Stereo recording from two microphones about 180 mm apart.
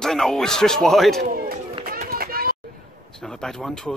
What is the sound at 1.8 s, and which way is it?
Run, 55° right (ahead or behind).